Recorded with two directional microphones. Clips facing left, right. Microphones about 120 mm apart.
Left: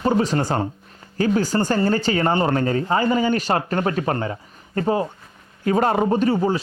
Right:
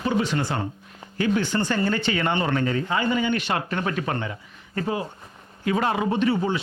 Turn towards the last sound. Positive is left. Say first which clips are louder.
# left 4 dB
turn(degrees=40)  # may be behind; listen again after turning